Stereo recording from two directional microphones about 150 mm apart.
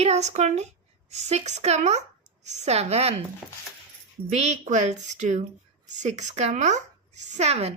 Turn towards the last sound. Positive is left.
turn(degrees=-45)  # may be behind; listen again after turning